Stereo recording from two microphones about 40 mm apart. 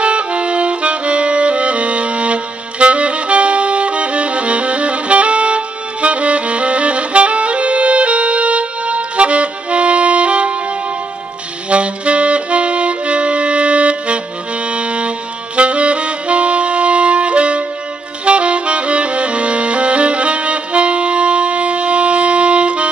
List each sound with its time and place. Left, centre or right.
0.0 s music: right
11.7 s saxophone: right
18.2 s music: right